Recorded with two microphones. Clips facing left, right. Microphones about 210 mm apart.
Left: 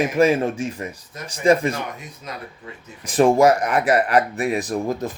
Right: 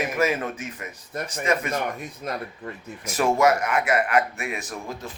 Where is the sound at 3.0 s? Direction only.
30° left (ahead or behind).